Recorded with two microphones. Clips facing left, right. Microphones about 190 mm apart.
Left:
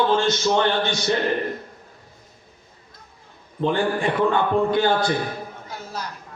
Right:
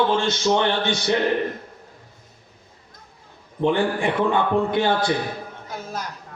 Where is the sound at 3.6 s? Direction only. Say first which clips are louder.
Right 1 dB; 15° right (ahead or behind).